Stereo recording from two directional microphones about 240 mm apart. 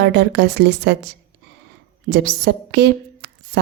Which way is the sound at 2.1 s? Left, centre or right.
Right.